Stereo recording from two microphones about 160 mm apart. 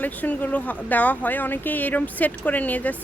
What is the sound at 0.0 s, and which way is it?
Speech, 10° left (ahead or behind).